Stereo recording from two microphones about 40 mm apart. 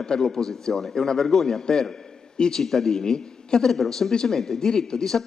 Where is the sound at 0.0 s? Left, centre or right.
Centre.